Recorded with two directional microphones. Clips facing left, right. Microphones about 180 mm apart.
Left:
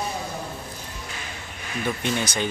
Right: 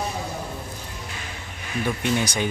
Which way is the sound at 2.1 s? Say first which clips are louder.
Right 2 dB; 10° right (ahead or behind).